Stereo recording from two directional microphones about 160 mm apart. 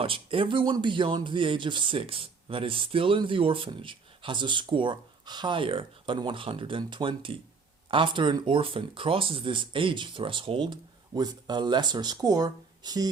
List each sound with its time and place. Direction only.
0.0 s speech: 35° right (ahead or behind)